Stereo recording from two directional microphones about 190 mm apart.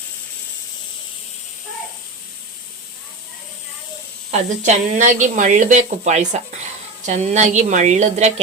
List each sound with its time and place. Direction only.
4.3 s speech: 35° right (ahead or behind)